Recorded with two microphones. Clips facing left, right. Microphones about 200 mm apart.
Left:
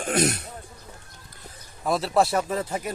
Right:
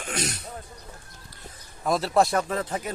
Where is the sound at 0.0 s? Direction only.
55° left (ahead or behind).